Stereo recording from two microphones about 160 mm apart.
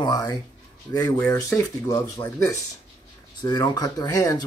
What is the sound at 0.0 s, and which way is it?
Speech, 25° left (ahead or behind).